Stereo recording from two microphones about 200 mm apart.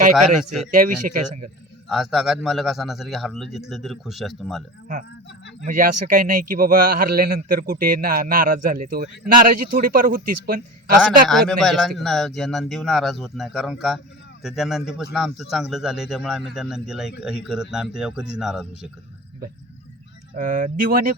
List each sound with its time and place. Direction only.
0.2 s a man's voice: centre (ahead or behind)
0.7 s a man's voice: 45° right (ahead or behind)
1.9 s a man's voice: centre (ahead or behind)
5.6 s a man's voice: 45° right (ahead or behind)
11.3 s a man's voice: centre (ahead or behind)
20.3 s speech: 40° right (ahead or behind)